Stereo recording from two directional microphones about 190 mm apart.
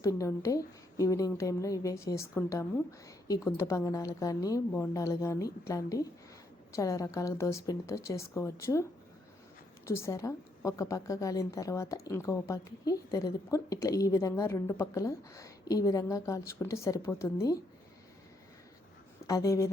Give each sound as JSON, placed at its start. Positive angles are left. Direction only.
{"t": 0.0, "sound": "a woman's voice", "side_deg": 15}
{"t": 19.3, "sound": "a woman's voice", "side_deg": 15}